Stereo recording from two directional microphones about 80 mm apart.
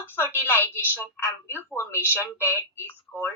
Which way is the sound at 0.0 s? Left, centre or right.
Left.